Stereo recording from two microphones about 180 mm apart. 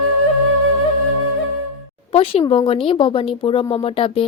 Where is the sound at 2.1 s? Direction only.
30° left (ahead or behind).